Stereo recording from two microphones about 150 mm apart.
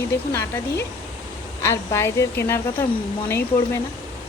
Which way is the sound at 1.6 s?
20° left (ahead or behind).